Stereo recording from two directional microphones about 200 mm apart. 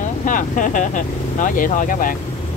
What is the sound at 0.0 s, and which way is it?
Speech, 40° left (ahead or behind).